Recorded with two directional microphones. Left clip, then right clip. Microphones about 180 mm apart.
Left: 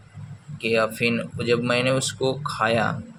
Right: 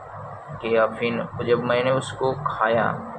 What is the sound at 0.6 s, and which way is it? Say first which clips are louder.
Speech: right 1 dB; 65° left (ahead or behind).